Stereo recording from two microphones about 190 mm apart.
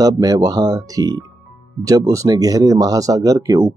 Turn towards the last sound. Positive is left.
turn(degrees=-20)  # may be behind; listen again after turning